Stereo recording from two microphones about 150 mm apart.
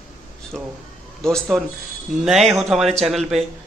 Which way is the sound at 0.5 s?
5° left (ahead or behind).